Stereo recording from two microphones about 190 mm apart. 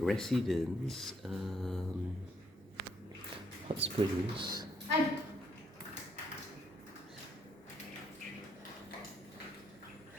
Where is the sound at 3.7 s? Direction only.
30° right (ahead or behind).